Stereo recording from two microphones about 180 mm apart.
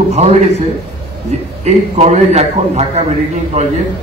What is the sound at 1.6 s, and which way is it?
A man's voice, 40° right (ahead or behind).